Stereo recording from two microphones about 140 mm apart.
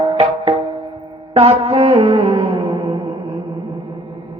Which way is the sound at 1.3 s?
45° right (ahead or behind).